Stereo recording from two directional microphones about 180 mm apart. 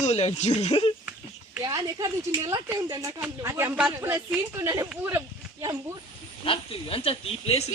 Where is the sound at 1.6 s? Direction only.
20° right (ahead or behind).